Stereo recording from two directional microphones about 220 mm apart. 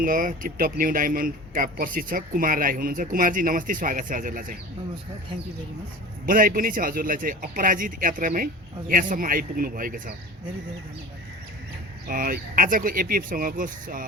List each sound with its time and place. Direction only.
0.0 s speech: 40° right (ahead or behind)
6.2 s speech: 40° right (ahead or behind)
12.0 s speech: 40° right (ahead or behind)